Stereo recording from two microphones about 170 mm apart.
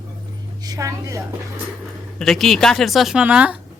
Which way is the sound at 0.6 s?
20° right (ahead or behind).